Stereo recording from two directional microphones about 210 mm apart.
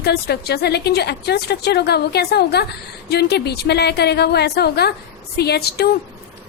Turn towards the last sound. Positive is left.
turn(degrees=50)  # may be behind; listen again after turning